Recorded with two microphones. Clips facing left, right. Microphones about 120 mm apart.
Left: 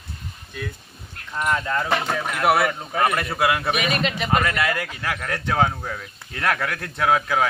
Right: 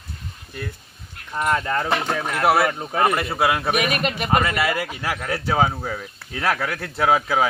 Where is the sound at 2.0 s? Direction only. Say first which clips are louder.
Right 1 dB; 5° right (ahead or behind).